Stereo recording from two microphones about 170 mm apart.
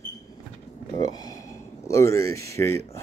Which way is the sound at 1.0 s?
20° left (ahead or behind).